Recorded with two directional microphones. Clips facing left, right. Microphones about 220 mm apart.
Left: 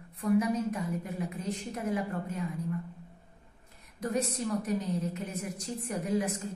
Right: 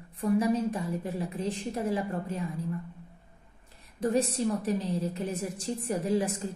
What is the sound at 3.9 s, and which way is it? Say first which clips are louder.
A woman's voice: right 5 dB; 30° right (ahead or behind).